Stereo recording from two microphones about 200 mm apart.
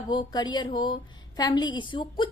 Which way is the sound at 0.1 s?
20° left (ahead or behind).